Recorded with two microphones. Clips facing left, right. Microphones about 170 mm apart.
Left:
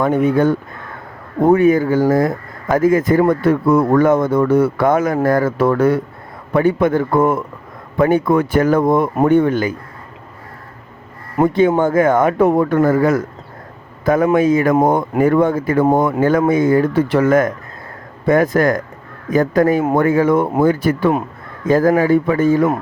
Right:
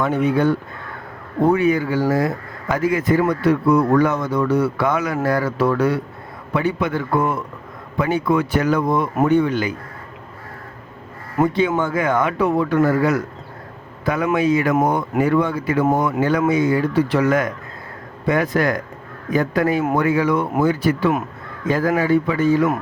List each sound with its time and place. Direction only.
0.0 s speech: 50° left (ahead or behind)
11.4 s speech: 50° left (ahead or behind)
14.8 s speech: 25° left (ahead or behind)
15.2 s speech: 50° left (ahead or behind)